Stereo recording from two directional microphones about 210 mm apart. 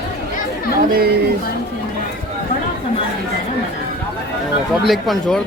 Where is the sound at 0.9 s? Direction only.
45° right (ahead or behind).